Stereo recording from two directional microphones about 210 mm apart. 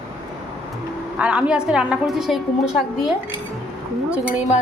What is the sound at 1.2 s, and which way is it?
Speech, 5° right (ahead or behind).